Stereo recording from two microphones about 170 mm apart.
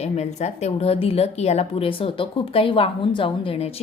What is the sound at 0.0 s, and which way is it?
A woman's voice, 40° left (ahead or behind).